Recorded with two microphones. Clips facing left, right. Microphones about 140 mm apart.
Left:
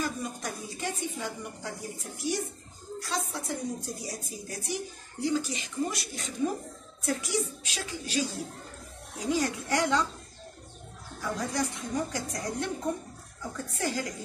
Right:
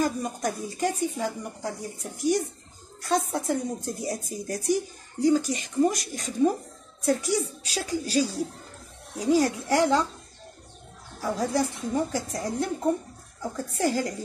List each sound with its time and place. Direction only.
0.0 s a woman's voice: 45° right (ahead or behind)
11.1 s a woman's voice: 30° right (ahead or behind)